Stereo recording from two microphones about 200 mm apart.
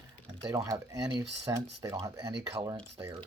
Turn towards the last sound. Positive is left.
turn(degrees=-15)  # may be behind; listen again after turning